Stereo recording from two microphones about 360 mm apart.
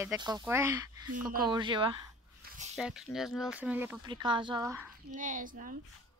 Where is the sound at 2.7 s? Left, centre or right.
Centre.